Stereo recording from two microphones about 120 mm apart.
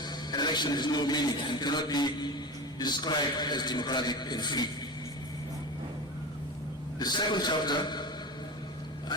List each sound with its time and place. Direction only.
0.0 s a man's voice: 35° left (ahead or behind)
7.0 s a man's voice: 35° left (ahead or behind)